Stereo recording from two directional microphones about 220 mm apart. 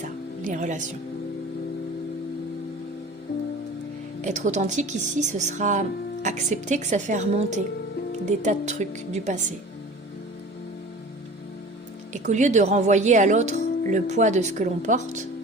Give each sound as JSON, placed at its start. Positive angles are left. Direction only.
{"t": 0.0, "sound": "music", "side_deg": -35}
{"t": 4.2, "sound": "speech", "side_deg": -35}
{"t": 12.1, "sound": "speech", "side_deg": -35}